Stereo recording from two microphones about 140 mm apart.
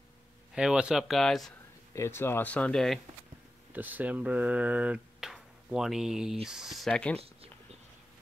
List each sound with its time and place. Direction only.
0.6 s speech: 5° right (ahead or behind)
2.0 s speech: 15° left (ahead or behind)
3.7 s speech: 10° right (ahead or behind); by 7.2 s 5° left (ahead or behind)